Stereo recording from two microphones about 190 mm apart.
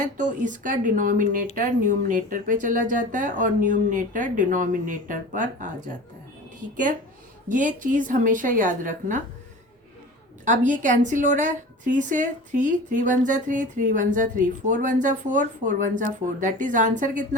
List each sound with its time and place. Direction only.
0.0 s speech: 40° right (ahead or behind)
7.4 s speech: 45° right (ahead or behind)
10.4 s a woman's voice: 40° right (ahead or behind)